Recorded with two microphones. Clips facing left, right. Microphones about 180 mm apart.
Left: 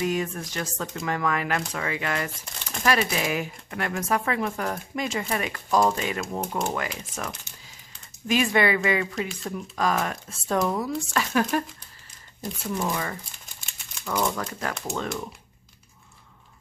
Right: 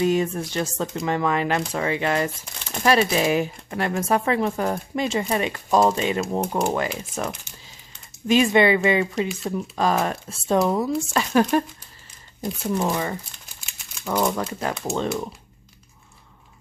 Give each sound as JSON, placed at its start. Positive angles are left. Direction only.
{"t": 0.0, "sound": "speech", "side_deg": -25}
{"t": 14.3, "sound": "speech", "side_deg": -20}